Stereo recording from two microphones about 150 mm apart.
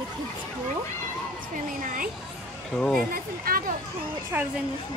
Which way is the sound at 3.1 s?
75° right (ahead or behind).